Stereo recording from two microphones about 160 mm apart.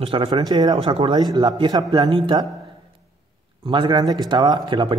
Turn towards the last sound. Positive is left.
turn(degrees=-30)  # may be behind; listen again after turning